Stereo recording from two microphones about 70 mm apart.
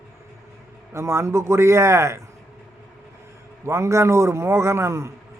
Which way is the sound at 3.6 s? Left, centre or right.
Right.